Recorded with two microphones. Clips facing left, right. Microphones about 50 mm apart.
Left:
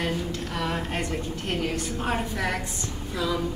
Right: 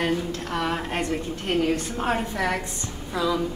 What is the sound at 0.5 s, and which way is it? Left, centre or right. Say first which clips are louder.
Speech: right 4 dB; centre.